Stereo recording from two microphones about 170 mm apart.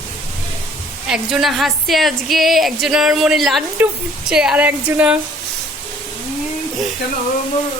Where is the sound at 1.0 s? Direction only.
5° right (ahead or behind).